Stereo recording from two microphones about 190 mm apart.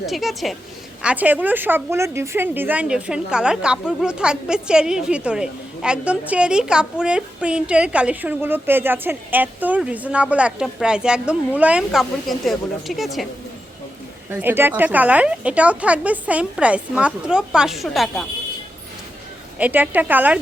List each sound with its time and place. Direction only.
0.0 s a woman's voice: centre (ahead or behind)
14.3 s a woman's voice: 10° right (ahead or behind)
19.5 s a woman's voice: 10° right (ahead or behind)